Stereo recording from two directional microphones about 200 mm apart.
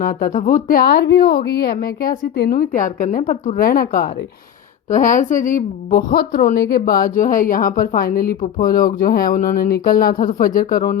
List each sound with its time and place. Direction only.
0.0 s a woman's voice: 45° left (ahead or behind)